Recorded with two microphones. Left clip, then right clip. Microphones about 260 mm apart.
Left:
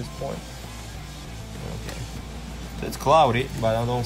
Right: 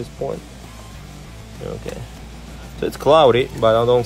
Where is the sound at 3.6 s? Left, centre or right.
Right.